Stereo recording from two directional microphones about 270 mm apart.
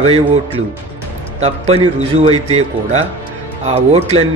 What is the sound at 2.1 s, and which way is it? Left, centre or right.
Speech, right.